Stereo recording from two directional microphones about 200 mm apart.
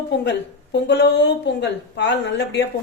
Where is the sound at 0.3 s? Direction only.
60° left (ahead or behind).